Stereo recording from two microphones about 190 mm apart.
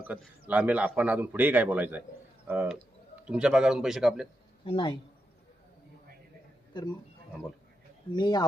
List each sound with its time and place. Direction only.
0.0 s a man's voice: 10° right (ahead or behind)
4.6 s speech: 25° left (ahead or behind)
8.1 s speech: 20° left (ahead or behind)